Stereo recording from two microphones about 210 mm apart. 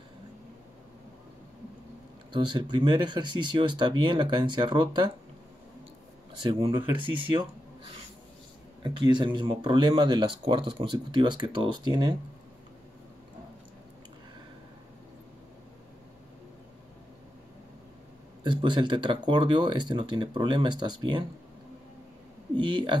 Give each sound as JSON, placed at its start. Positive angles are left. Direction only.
{"t": 2.3, "sound": "speech", "side_deg": -20}
{"t": 6.3, "sound": "speech", "side_deg": -25}
{"t": 8.8, "sound": "speech", "side_deg": -20}
{"t": 18.4, "sound": "speech", "side_deg": -20}
{"t": 22.6, "sound": "speech", "side_deg": -20}